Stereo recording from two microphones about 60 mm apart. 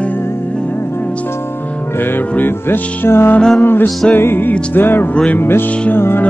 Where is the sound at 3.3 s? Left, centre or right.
Centre.